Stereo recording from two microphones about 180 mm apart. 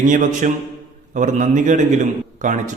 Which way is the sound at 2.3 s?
45° right (ahead or behind).